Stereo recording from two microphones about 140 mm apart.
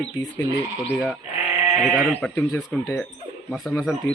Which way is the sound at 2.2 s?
5° left (ahead or behind).